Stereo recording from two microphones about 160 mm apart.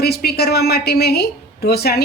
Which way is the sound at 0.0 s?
85° left.